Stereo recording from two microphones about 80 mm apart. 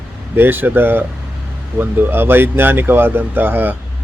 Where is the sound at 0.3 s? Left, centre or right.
Right.